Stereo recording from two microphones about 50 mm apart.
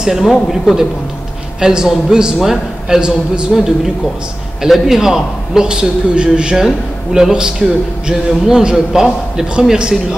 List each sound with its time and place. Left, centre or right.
0.0 s speech: centre
1.6 s a man's voice: centre